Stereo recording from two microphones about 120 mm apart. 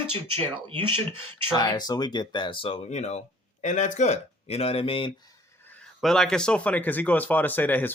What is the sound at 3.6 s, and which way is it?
Speech, 80° left.